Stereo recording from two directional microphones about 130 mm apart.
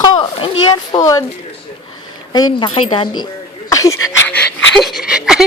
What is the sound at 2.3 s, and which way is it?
Speech, 35° left (ahead or behind).